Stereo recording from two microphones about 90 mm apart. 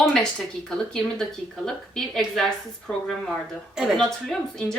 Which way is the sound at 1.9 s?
5° left (ahead or behind).